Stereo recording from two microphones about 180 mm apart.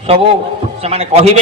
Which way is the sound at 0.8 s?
35° right (ahead or behind).